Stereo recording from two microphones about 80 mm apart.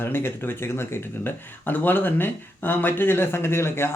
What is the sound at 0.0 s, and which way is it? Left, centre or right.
Speech, left.